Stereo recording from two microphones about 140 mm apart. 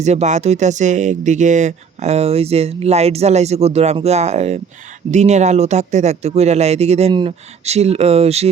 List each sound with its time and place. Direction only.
0.0 s speech: 55° right (ahead or behind)
7.1 s speech: 35° right (ahead or behind)
7.6 s speech: 50° right (ahead or behind)